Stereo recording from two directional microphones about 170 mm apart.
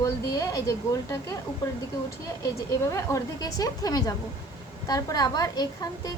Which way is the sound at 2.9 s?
20° left (ahead or behind).